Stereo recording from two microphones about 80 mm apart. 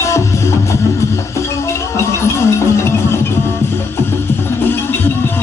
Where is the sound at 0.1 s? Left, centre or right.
Left.